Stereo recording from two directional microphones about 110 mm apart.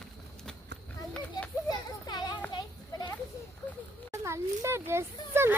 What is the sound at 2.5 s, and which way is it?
Children playing, 40° left (ahead or behind).